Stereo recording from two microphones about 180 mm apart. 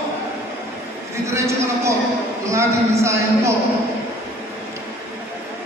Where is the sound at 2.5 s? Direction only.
15° right (ahead or behind).